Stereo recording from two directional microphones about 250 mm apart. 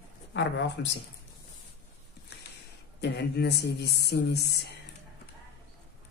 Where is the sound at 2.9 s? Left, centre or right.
Left.